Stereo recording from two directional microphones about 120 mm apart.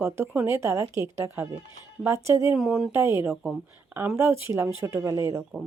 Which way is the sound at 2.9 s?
20° right (ahead or behind).